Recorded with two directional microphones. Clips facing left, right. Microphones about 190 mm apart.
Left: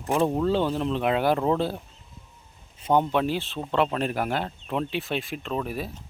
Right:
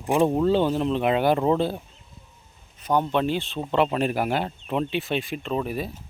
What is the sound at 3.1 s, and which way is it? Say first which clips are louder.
Speech: right 1 dB; 5° left (ahead or behind).